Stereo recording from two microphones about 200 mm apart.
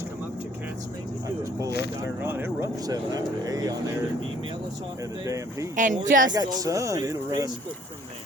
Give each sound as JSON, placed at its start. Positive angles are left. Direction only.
{"t": 2.0, "sound": "speech", "side_deg": -10}
{"t": 5.2, "sound": "speech", "side_deg": -15}
{"t": 5.7, "sound": "speech", "side_deg": -40}
{"t": 6.3, "sound": "speech", "side_deg": -15}